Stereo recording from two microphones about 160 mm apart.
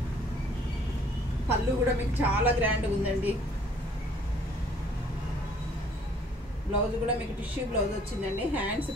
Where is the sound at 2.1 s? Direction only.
10° right (ahead or behind).